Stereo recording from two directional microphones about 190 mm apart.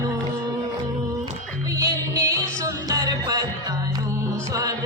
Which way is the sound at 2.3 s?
20° right (ahead or behind).